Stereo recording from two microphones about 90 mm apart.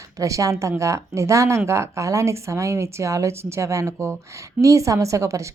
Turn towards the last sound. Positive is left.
turn(degrees=-35)  # may be behind; listen again after turning